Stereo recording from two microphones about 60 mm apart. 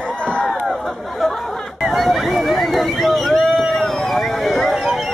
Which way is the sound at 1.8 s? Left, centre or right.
Centre.